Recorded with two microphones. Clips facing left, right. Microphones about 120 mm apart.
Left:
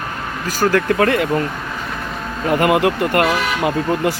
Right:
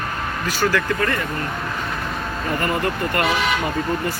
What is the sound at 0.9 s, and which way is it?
Speech, 70° left (ahead or behind).